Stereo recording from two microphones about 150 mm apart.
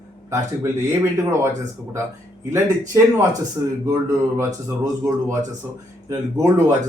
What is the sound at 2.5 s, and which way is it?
A man's voice, 20° right (ahead or behind).